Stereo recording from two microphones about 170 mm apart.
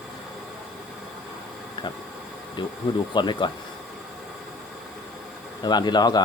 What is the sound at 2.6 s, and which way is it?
Speech, 30° left (ahead or behind).